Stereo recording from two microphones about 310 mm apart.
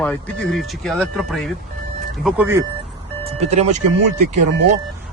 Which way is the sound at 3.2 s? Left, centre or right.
Right.